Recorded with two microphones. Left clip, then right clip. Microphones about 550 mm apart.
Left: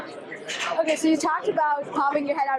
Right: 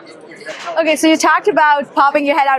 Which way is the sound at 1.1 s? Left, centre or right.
Right.